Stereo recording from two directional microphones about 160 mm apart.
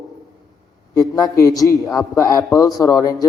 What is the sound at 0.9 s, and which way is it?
A man's voice, 20° left (ahead or behind).